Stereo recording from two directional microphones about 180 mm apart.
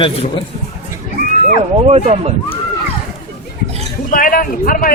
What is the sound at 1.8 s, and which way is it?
Speech, 35° right (ahead or behind).